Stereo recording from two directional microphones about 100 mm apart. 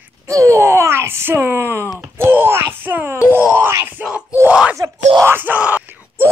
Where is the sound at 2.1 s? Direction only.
20° right (ahead or behind).